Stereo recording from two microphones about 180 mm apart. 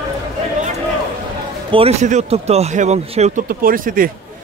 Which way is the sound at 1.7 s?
35° right (ahead or behind).